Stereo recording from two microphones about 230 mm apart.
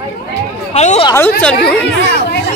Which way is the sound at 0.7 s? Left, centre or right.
Left.